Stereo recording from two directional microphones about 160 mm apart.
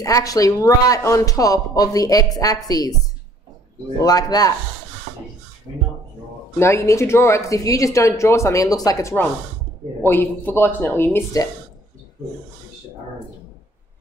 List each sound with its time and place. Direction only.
0.0 s speech: 20° left (ahead or behind)
4.0 s speech: 25° left (ahead or behind)
6.6 s speech: 15° left (ahead or behind)